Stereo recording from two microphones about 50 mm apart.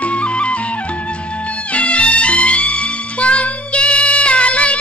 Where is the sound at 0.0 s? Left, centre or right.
Left.